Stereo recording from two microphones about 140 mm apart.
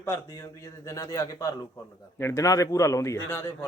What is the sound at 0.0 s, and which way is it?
A man's voice, 20° left (ahead or behind).